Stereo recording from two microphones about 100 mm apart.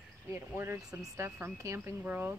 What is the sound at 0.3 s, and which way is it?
Speech, 25° right (ahead or behind).